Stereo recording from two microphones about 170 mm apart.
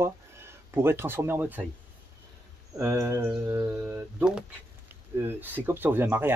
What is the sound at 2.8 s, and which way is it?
Speech, 15° right (ahead or behind).